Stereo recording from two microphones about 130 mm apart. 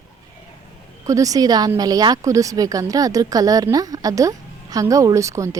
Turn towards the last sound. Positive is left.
turn(degrees=-25)  # may be behind; listen again after turning